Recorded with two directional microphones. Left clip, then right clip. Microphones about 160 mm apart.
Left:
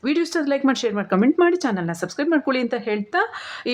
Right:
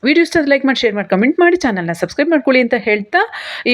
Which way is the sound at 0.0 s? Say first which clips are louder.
Right 9 dB; 20° right (ahead or behind).